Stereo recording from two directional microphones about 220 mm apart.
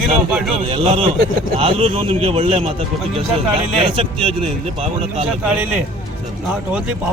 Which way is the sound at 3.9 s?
25° right (ahead or behind).